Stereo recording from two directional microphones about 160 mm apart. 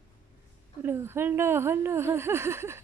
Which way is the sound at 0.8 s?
15° right (ahead or behind).